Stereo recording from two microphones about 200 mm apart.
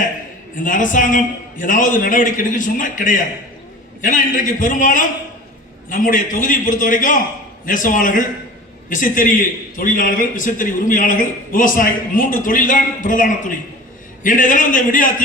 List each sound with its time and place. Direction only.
0.6 s a man's voice: 40° left (ahead or behind)